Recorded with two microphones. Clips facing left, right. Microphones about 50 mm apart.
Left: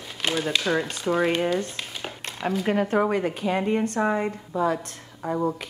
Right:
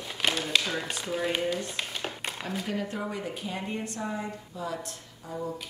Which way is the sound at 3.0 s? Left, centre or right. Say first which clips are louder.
Left 11 dB; left.